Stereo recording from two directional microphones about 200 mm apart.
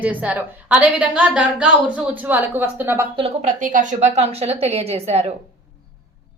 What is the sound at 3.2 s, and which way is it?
A woman's voice, 35° right (ahead or behind).